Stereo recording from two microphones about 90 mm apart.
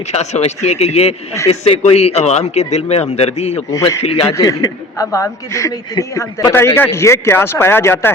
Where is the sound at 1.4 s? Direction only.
90° left.